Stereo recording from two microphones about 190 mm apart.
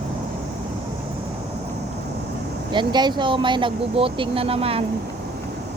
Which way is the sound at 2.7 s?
25° right (ahead or behind).